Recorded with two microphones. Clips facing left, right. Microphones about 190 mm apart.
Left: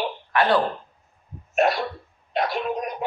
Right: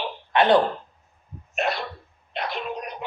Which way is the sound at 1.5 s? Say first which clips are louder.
Left 6 dB; 40° left (ahead or behind).